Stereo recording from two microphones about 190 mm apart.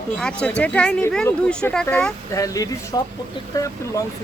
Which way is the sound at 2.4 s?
20° left (ahead or behind).